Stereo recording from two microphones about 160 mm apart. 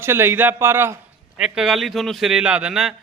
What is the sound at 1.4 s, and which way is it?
A man's voice, 5° right (ahead or behind).